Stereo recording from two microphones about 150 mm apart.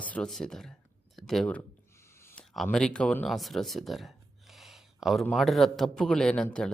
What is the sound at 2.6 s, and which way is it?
Speech, 5° left (ahead or behind).